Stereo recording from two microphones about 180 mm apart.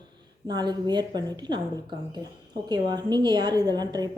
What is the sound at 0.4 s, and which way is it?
A woman's voice, 25° right (ahead or behind).